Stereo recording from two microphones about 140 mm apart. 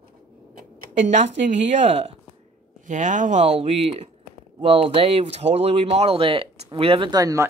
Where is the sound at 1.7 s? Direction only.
50° right (ahead or behind).